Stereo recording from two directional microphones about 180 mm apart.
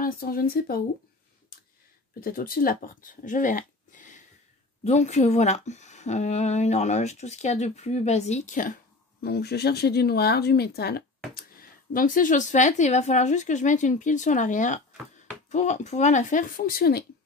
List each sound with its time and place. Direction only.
0.0 s speech: 55° left (ahead or behind)
2.1 s speech: 55° left (ahead or behind)
9.2 s speech: 65° left (ahead or behind)
11.3 s speech: 50° left (ahead or behind)